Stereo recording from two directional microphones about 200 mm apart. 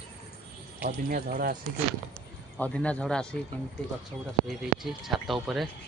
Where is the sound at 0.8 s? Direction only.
45° right (ahead or behind).